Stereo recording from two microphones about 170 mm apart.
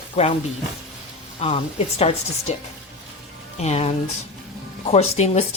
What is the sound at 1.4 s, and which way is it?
A woman's voice, 35° left (ahead or behind).